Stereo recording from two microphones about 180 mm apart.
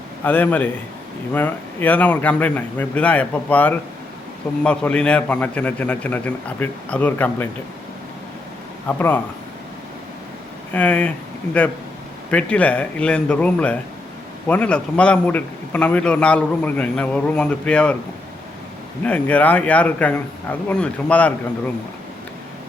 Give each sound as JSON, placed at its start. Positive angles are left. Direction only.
{"t": 0.3, "sound": "a man's voice", "side_deg": 10}
{"t": 8.9, "sound": "a man's voice", "side_deg": 10}
{"t": 10.7, "sound": "a man's voice", "side_deg": 10}
{"t": 12.3, "sound": "a man's voice", "side_deg": 5}
{"t": 19.0, "sound": "a man's voice", "side_deg": 10}